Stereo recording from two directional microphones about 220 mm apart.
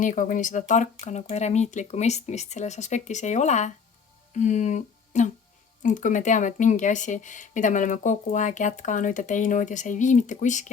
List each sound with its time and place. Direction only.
0.0 s speech: 35° left (ahead or behind)